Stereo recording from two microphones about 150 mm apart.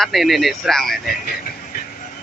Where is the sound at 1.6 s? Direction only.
65° left (ahead or behind).